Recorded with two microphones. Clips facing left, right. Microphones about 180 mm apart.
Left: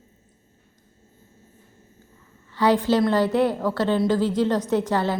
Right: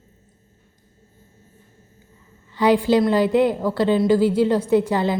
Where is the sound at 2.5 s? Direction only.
15° right (ahead or behind).